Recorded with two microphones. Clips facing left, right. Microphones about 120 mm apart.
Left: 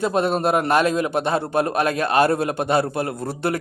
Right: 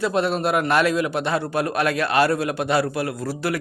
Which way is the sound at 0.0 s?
45° left (ahead or behind).